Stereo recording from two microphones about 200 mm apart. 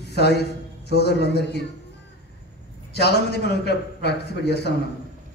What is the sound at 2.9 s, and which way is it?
A man's voice, 55° left (ahead or behind).